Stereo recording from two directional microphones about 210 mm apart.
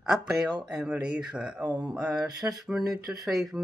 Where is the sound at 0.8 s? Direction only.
5° right (ahead or behind).